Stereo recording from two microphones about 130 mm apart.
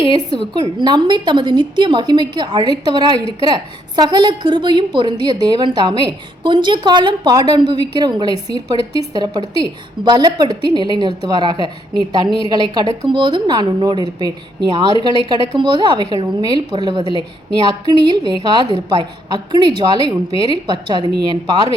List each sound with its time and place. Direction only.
0.1 s a woman's voice: 35° right (ahead or behind)